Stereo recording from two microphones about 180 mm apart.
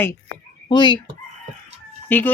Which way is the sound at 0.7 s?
25° left (ahead or behind).